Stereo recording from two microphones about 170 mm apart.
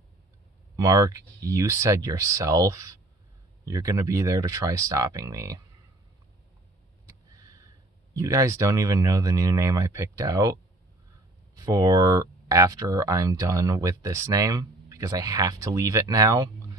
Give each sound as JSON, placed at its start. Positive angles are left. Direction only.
{"t": 0.7, "sound": "speech", "side_deg": -20}
{"t": 7.1, "sound": "speech", "side_deg": -20}
{"t": 11.5, "sound": "speech", "side_deg": -20}